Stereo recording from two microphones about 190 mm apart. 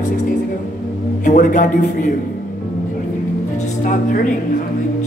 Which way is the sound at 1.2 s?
40° left (ahead or behind).